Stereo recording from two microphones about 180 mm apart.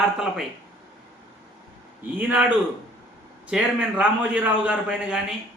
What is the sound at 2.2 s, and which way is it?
Speech, 10° right (ahead or behind).